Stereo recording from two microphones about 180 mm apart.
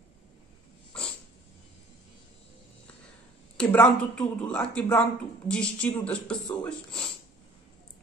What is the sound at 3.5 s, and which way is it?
A woman's voice, 5° left (ahead or behind).